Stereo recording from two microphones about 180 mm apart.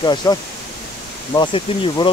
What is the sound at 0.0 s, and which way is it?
Speech, 20° left (ahead or behind).